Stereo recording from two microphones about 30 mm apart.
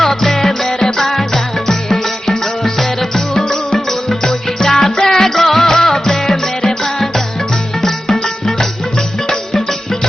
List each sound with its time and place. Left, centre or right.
0.0 s music: centre